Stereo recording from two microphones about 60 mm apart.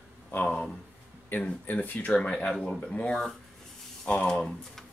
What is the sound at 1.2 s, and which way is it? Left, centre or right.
Speech, left.